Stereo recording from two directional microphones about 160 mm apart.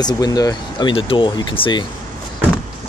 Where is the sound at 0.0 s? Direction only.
25° left (ahead or behind).